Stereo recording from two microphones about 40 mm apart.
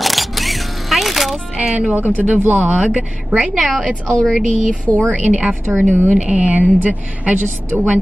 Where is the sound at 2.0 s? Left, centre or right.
Right.